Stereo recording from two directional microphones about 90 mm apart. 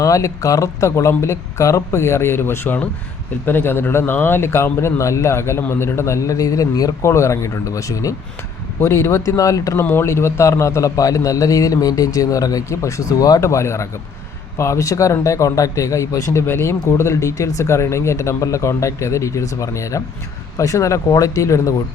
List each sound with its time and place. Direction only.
0.0 s speech: 35° left (ahead or behind)
9.8 s speech: 25° left (ahead or behind)